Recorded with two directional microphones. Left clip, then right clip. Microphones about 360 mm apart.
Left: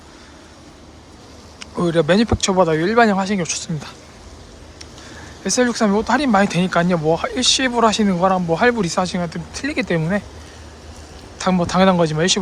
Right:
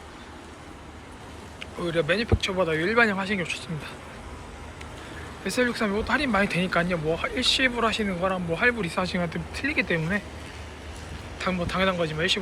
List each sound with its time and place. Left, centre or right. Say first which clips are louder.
1.5 s speech: left 9 dB; centre
5.4 s speech: left 7 dB; centre
11.3 s speech: left 9 dB; centre